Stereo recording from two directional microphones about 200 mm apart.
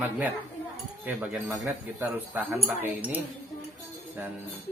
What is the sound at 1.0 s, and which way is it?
Speech, 10° right (ahead or behind).